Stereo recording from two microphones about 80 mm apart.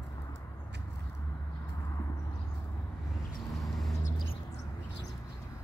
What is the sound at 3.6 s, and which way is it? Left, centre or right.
Vehicle, centre.